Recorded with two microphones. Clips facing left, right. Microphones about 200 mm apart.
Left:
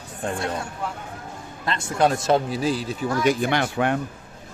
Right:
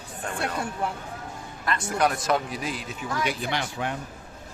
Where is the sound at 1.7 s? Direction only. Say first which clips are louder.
Left 4 dB; 25° left (ahead or behind).